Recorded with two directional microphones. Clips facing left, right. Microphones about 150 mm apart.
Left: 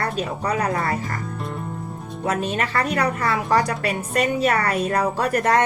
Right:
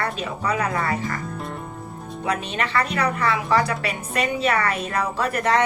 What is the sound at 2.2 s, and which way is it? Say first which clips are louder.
A woman's voice: left 2 dB; 40° left (ahead or behind).